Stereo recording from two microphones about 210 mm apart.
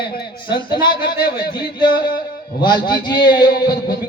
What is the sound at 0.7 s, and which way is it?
Speech, 50° left (ahead or behind).